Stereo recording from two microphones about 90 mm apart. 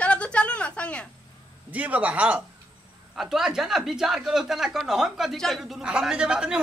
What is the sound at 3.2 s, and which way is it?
Speech, 5° right (ahead or behind).